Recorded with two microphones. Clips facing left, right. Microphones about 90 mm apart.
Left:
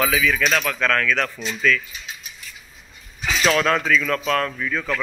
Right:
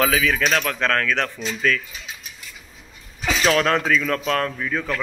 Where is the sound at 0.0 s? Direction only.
40° right (ahead or behind).